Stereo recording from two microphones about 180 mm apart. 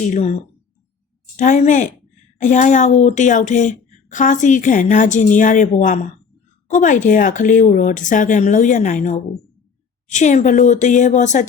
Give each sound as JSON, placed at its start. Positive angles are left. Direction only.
{"t": 0.1, "sound": "speech", "side_deg": 40}
{"t": 1.4, "sound": "speech", "side_deg": 40}